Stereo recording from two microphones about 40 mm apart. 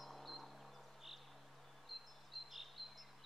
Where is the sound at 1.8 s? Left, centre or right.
Centre.